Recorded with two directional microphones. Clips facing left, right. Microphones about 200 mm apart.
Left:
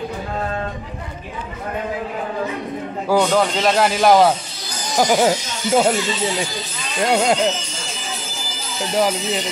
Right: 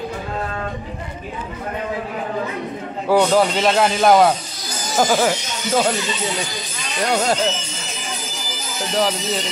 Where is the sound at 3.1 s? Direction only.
5° right (ahead or behind).